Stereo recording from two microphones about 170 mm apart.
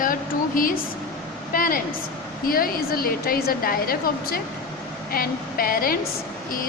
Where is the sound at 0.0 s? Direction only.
55° left (ahead or behind).